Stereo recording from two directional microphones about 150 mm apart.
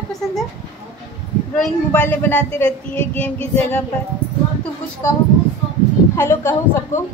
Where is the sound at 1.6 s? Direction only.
10° left (ahead or behind).